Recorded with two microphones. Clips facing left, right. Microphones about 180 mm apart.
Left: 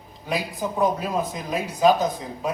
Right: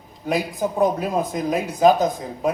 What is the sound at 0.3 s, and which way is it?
Speech, 50° right (ahead or behind).